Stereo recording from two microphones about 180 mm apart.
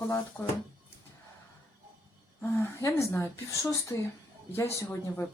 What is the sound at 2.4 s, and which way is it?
A woman's voice, 15° left (ahead or behind).